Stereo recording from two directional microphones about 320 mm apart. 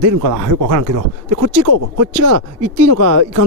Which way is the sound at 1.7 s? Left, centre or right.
Right.